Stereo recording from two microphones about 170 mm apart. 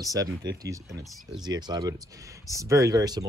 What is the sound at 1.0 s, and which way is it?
Speech, centre (ahead or behind).